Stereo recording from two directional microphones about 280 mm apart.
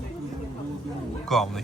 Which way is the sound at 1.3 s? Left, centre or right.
Centre.